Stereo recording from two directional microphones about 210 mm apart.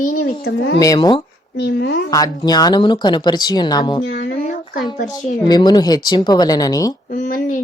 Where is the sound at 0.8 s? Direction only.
20° left (ahead or behind).